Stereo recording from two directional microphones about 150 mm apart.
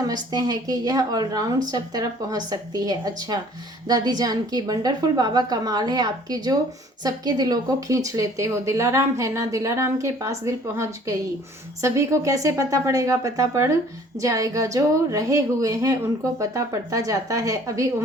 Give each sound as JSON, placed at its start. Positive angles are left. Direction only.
{"t": 0.1, "sound": "speech", "side_deg": -25}